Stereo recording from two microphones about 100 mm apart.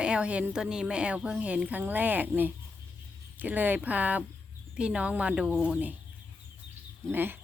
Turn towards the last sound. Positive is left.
turn(degrees=-20)  # may be behind; listen again after turning